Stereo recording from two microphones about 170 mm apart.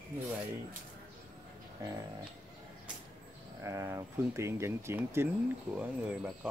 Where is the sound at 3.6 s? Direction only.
20° right (ahead or behind).